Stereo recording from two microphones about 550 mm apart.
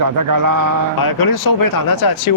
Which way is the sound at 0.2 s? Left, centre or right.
Right.